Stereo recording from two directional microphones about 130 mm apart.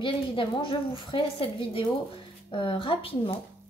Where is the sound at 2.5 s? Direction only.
40° left (ahead or behind).